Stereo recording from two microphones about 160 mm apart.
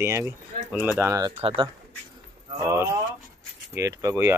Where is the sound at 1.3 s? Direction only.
35° right (ahead or behind).